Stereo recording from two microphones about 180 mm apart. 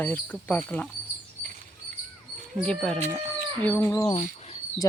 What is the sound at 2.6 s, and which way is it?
Speech, 5° left (ahead or behind).